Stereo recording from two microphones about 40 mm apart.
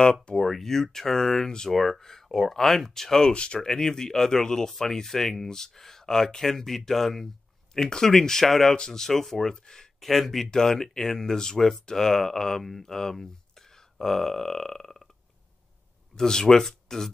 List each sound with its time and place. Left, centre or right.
0.0 s speech: centre
0.4 s speech: centre
1.7 s speech: centre
3.3 s speech: left
3.6 s speech: centre
10.0 s speech: centre
10.5 s speech: centre
16.2 s speech: centre